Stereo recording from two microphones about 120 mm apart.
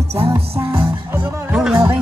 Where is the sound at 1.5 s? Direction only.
5° right (ahead or behind).